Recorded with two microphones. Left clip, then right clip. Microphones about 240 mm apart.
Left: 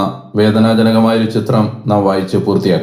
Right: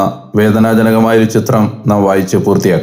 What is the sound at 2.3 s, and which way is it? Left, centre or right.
Speech, right.